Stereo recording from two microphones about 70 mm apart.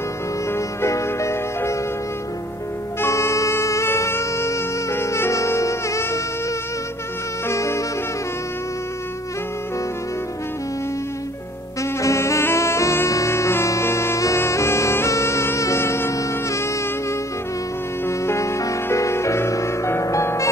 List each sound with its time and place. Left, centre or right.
0.5 s music: left
3.0 s music: left
7.4 s saxophone: left
11.8 s brass instrument: left
18.0 s music: left